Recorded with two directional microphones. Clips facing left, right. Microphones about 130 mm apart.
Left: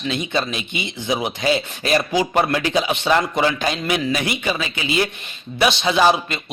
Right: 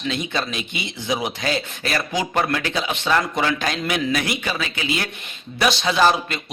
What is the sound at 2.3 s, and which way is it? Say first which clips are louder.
A man's voice: left 3 dB; 15° left (ahead or behind).